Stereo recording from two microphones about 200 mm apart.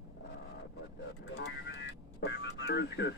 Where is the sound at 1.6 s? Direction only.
65° left (ahead or behind).